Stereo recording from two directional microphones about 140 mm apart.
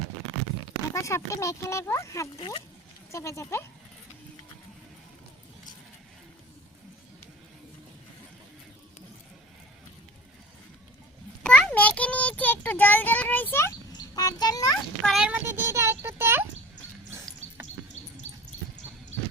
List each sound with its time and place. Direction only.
0.9 s speech: 20° left (ahead or behind)
2.4 s speech: 35° left (ahead or behind)
3.1 s speech: 20° left (ahead or behind)
11.4 s child singing: 10° left (ahead or behind)
13.9 s a sound: 25° left (ahead or behind)
15.0 s a sound: 5° right (ahead or behind)